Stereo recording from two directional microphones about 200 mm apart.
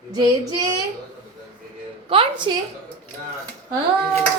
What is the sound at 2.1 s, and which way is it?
Speech, 25° right (ahead or behind).